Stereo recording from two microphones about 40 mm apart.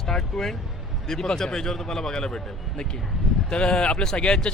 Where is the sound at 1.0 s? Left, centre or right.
Centre.